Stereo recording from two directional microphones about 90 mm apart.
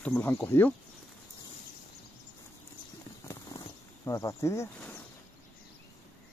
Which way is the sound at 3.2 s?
35° left (ahead or behind).